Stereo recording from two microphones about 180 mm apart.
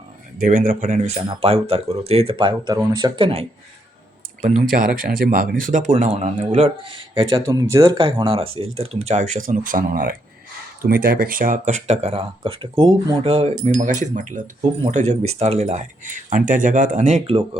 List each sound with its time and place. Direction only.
0.3 s speech: 50° right (ahead or behind); by 3.4 s 30° right (ahead or behind)
4.4 s speech: 45° right (ahead or behind)
6.1 s a man's voice: 35° right (ahead or behind)
7.4 s speech: 20° right (ahead or behind); by 17.2 s 45° right (ahead or behind)
17.2 s speech: 30° right (ahead or behind)